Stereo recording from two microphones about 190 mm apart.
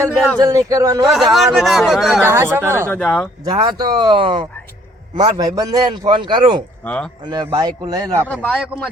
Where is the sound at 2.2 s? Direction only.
10° right (ahead or behind).